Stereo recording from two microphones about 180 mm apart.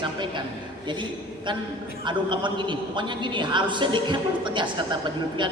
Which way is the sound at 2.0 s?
25° right (ahead or behind).